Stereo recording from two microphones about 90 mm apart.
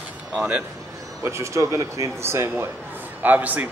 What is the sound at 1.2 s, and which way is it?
Speech, 35° right (ahead or behind).